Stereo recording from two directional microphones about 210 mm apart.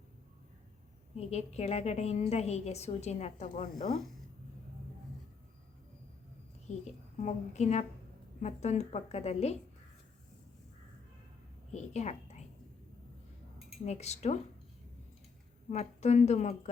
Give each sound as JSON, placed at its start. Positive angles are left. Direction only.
{"t": 1.1, "sound": "a woman's voice", "side_deg": 30}
{"t": 6.7, "sound": "a woman's voice", "side_deg": 35}
{"t": 11.7, "sound": "a woman's voice", "side_deg": 30}
{"t": 13.8, "sound": "a woman's voice", "side_deg": 30}
{"t": 15.7, "sound": "a woman's voice", "side_deg": 30}